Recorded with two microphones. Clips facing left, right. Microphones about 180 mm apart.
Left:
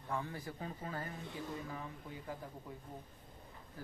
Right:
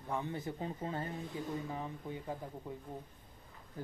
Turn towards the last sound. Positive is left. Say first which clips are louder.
# right 4 dB
turn(degrees=-20)  # may be behind; listen again after turning